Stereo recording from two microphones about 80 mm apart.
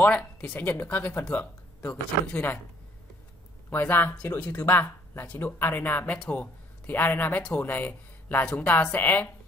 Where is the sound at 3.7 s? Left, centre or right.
Left.